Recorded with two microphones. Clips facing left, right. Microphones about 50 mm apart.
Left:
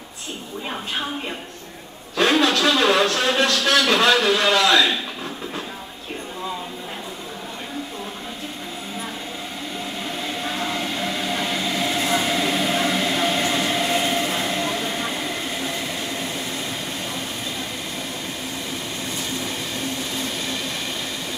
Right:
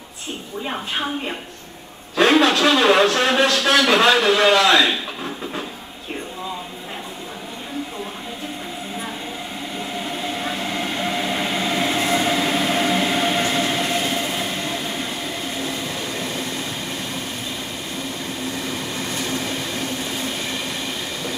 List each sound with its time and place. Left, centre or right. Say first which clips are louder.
0.7 s a woman's voice: right 2 dB; centre
10.1 s train: right 1 dB; centre